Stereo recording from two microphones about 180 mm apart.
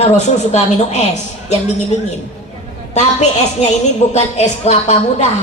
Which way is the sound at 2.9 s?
40° left (ahead or behind).